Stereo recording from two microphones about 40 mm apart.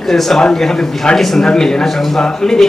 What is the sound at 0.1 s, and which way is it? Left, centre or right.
A man's voice, centre.